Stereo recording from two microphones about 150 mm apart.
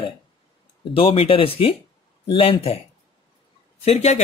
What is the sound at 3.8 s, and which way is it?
Speech, 45° left (ahead or behind).